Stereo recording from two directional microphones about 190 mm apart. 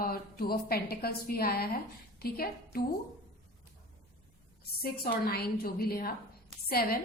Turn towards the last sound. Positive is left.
turn(degrees=55)  # may be behind; listen again after turning